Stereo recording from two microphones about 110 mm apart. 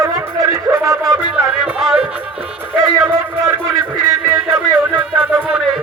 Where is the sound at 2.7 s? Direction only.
25° right (ahead or behind).